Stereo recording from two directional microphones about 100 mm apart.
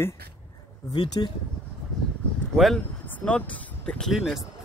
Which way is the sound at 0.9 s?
45° left (ahead or behind).